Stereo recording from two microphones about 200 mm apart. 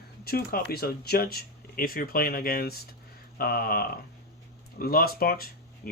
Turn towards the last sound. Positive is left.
turn(degrees=50)  # may be behind; listen again after turning